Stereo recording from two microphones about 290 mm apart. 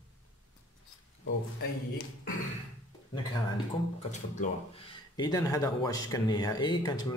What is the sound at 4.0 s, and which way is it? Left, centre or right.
Speech, left.